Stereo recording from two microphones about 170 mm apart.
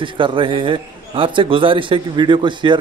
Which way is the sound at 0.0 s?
30° right (ahead or behind).